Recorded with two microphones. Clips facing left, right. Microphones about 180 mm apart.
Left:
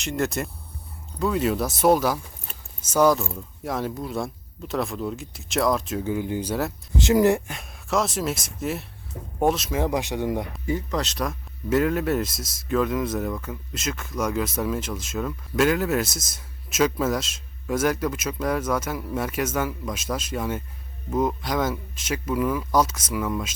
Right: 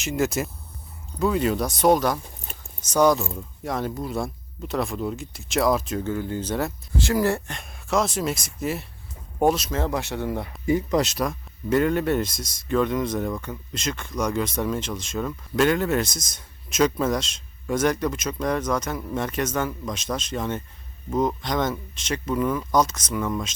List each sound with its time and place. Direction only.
0.0 s speech: centre (ahead or behind)
6.1 s speech: 15° left (ahead or behind)
6.9 s speech: 20° left (ahead or behind)
7.5 s speech: centre (ahead or behind)
9.7 s speech: 15° left (ahead or behind)
10.7 s speech: 10° right (ahead or behind); by 23.6 s 5° left (ahead or behind)